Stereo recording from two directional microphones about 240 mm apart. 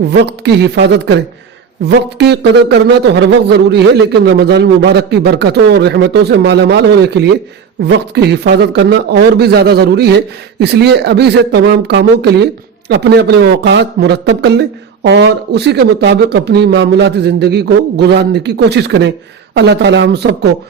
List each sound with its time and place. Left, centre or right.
0.0 s a man's voice: right